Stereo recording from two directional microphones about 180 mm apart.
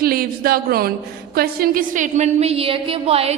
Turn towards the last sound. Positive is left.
turn(degrees=-35)  # may be behind; listen again after turning